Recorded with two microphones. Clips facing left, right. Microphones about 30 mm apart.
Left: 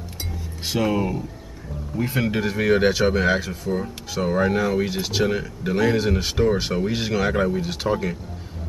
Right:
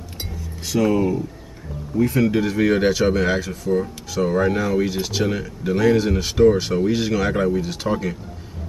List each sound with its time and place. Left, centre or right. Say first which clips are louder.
0.7 s speech: right 4 dB; left; by 8.2 s centre